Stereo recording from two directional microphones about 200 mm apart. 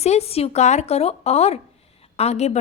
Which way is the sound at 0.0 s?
30° left (ahead or behind).